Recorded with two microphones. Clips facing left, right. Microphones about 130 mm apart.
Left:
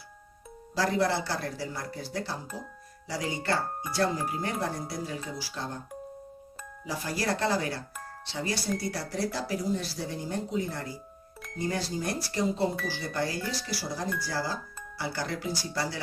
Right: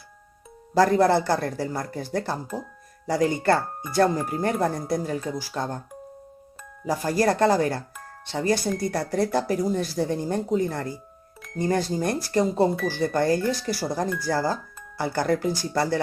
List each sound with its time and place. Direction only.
0.7 s speech: 50° right (ahead or behind)
6.8 s speech: 45° right (ahead or behind)